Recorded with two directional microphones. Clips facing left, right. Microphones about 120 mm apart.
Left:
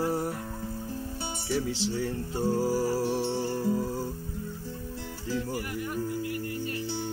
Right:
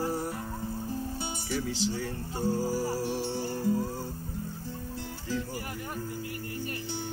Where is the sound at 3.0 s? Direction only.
35° left (ahead or behind).